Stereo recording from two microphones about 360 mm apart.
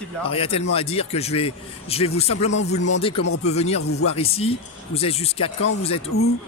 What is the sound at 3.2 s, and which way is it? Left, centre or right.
Speech, left.